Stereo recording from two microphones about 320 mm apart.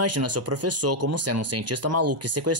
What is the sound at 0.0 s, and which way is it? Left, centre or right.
Speech, right.